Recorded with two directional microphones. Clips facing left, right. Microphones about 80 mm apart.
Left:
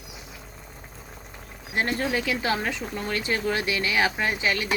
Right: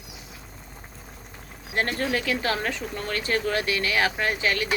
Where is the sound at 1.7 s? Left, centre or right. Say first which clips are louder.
Even; centre.